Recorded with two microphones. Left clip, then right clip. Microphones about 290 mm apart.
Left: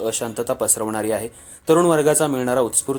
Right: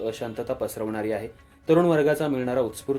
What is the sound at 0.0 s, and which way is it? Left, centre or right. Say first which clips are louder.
Speech: left 6 dB; left.